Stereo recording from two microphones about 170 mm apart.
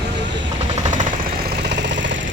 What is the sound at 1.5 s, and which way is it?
Engine, 85° right.